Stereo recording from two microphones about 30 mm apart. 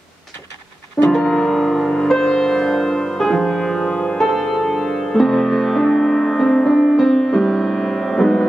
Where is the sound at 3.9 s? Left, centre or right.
Left.